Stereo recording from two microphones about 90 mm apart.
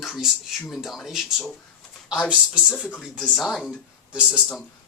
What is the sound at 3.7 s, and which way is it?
Speech, 10° right (ahead or behind).